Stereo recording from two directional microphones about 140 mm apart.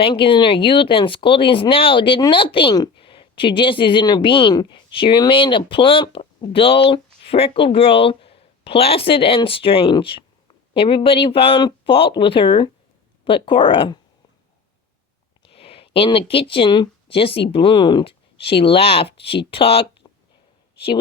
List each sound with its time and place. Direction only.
0.0 s speech: 40° left (ahead or behind)
15.4 s speech: 40° left (ahead or behind)